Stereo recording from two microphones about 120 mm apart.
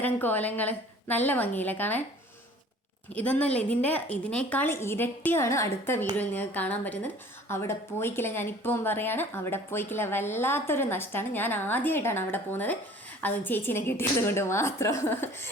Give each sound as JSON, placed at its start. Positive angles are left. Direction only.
{"t": 0.0, "sound": "a woman's voice", "side_deg": 15}
{"t": 3.1, "sound": "a woman's voice", "side_deg": 10}